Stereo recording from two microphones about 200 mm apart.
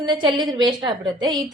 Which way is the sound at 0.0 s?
25° right (ahead or behind).